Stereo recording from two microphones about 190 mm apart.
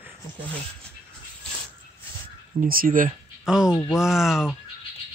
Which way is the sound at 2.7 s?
45° right (ahead or behind).